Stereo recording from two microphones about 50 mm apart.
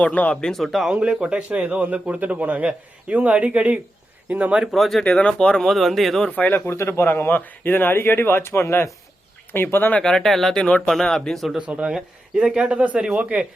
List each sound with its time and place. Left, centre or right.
0.0 s speech: left
0.5 s speech: centre
0.9 s a man's voice: centre
4.7 s speech: centre
5.0 s speech: centre
5.5 s speech: centre
6.7 s a man's voice: left
7.3 s speech: left
9.6 s speech: left
10.0 s speech: centre
10.6 s speech: left
10.8 s speech: centre
11.6 s a man's voice: right